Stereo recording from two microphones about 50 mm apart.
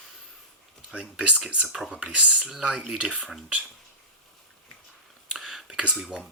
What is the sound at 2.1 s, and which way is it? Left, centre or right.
Speech, centre.